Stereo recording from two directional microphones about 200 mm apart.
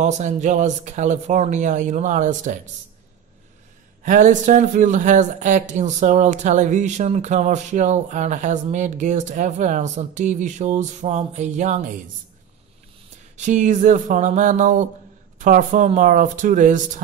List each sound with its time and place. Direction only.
0.0 s speech: 35° right (ahead or behind)
4.0 s speech: 40° right (ahead or behind)
13.4 s speech: 40° right (ahead or behind)